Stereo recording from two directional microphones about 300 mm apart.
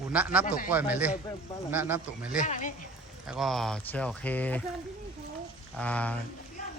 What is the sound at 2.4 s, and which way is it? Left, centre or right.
Speech, left.